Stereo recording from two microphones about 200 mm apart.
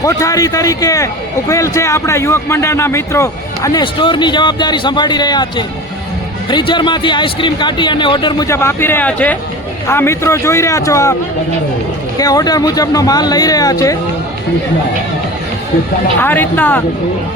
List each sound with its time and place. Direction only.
0.0 s a man's voice: 15° left (ahead or behind)
12.1 s speech: 20° left (ahead or behind)
16.2 s a man's voice: 10° left (ahead or behind)